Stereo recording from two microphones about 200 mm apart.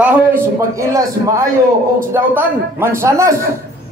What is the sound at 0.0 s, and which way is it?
A man's voice, 10° right (ahead or behind).